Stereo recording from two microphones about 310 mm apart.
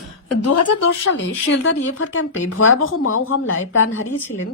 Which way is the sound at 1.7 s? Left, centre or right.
Left.